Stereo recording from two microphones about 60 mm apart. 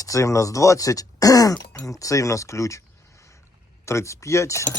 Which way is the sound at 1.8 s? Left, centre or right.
Left.